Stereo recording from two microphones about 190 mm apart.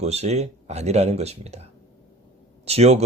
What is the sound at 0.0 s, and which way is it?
Speech, 35° right (ahead or behind).